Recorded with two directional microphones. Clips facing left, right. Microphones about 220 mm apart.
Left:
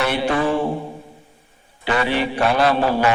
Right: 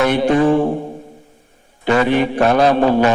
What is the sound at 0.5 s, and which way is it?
Mantra, 50° right (ahead or behind).